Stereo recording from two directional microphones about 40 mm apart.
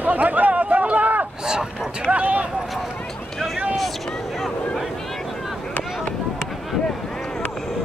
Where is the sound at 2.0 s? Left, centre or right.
Right.